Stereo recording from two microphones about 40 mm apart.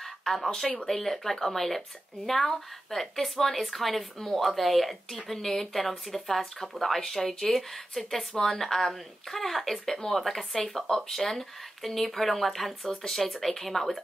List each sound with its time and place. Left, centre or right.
0.0 s a sound: centre
0.8 s a woman's voice: centre
10.9 s a woman's voice: centre
11.1 s speech: centre